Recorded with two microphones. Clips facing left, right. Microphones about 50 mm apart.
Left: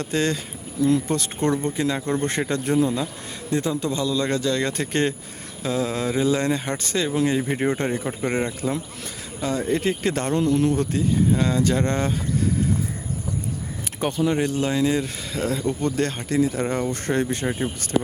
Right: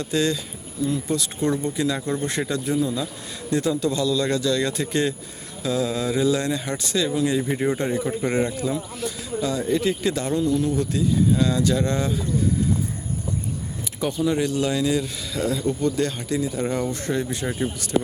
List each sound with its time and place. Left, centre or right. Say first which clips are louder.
0.0 s speech: even; left
0.8 s speech: left 4 dB; left
2.5 s speech: left 3 dB; left
3.5 s a man's voice: right 2 dB; left
8.6 s speech: right 1 dB; left
9.4 s speech: even; left
14.0 s speech: even; left
17.4 s a man's voice: left 1 dB; left